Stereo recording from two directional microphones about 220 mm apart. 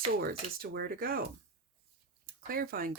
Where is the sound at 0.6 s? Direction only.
45° right (ahead or behind).